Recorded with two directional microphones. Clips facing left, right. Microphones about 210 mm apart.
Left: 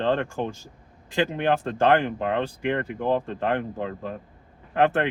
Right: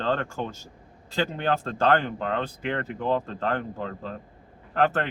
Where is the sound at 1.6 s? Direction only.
15° left (ahead or behind).